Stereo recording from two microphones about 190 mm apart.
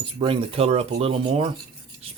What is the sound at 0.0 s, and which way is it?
Speech, 30° right (ahead or behind).